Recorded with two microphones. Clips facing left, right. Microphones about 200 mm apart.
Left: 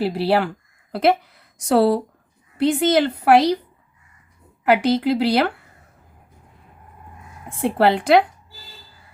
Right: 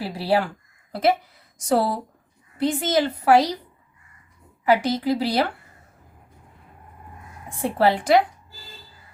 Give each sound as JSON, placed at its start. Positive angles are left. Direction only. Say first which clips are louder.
{"t": 0.0, "sound": "a woman's voice", "louder": "left 3 dB", "side_deg": 65}
{"t": 1.6, "sound": "a woman's voice", "louder": "left 5 dB", "side_deg": 65}
{"t": 4.6, "sound": "a woman's voice", "louder": "left 3 dB", "side_deg": 65}
{"t": 7.8, "sound": "a woman's voice", "louder": "left 2 dB", "side_deg": 65}